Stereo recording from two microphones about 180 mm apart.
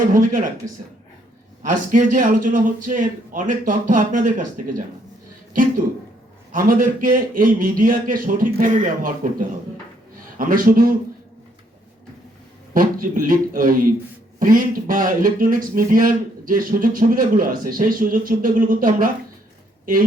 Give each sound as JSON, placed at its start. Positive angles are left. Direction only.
{"t": 0.0, "sound": "speech", "side_deg": -50}
{"t": 1.6, "sound": "speech", "side_deg": -45}
{"t": 6.5, "sound": "speech", "side_deg": -50}
{"t": 10.3, "sound": "speech", "side_deg": -50}
{"t": 12.7, "sound": "speech", "side_deg": -50}